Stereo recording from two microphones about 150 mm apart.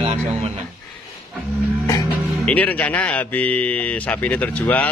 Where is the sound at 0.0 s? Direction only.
50° right (ahead or behind).